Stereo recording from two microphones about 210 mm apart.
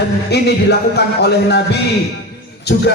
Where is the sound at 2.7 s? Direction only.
50° left (ahead or behind).